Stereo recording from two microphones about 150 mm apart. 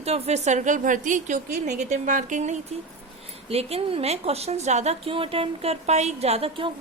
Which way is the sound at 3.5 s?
40° right (ahead or behind).